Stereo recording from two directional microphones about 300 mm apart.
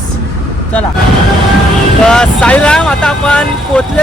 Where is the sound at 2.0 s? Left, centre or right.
Centre.